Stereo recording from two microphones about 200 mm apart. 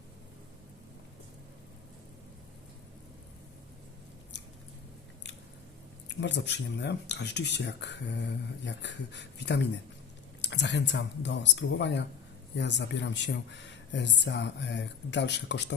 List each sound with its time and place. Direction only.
6.1 s speech: 60° left (ahead or behind)